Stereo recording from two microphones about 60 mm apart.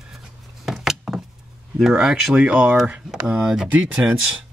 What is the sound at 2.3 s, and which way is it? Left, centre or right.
Speech, right.